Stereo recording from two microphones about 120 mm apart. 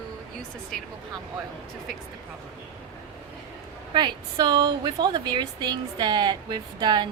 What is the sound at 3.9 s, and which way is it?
A woman's voice, 40° right (ahead or behind).